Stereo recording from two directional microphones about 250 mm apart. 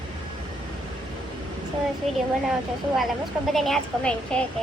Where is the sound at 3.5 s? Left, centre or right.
Centre.